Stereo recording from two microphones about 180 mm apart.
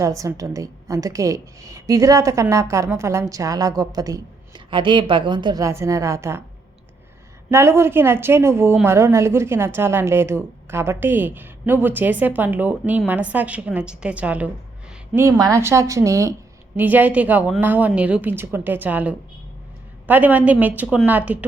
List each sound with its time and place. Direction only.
0.0 s a woman's voice: 15° right (ahead or behind)
7.5 s a woman's voice: 15° right (ahead or behind)